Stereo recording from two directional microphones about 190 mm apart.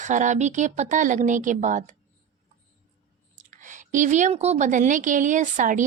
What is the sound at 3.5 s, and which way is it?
Speech, 40° right (ahead or behind).